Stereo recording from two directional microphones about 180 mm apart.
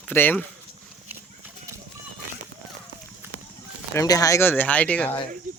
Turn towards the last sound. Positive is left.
turn(degrees=10)  # may be behind; listen again after turning